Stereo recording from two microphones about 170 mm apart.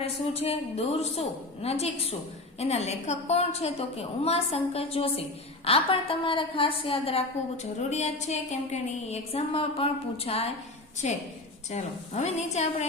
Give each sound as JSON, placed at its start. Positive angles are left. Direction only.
{"t": 0.0, "sound": "a woman's voice", "side_deg": 35}